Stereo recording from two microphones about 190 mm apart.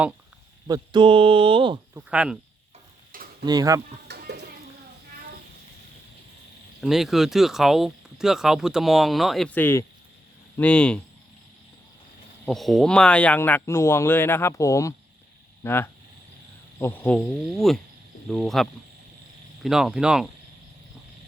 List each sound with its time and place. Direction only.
0.7 s speech: 25° right (ahead or behind)
2.0 s speech: 5° right (ahead or behind)
3.4 s speech: 20° right (ahead or behind)
4.1 s a sound: 60° right (ahead or behind)
6.8 s speech: centre (ahead or behind)
12.5 s speech: centre (ahead or behind)